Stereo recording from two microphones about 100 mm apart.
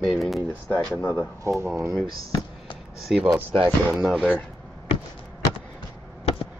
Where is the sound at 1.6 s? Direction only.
30° right (ahead or behind).